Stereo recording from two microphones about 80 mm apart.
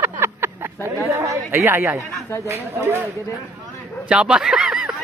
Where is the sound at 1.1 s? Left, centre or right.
Right.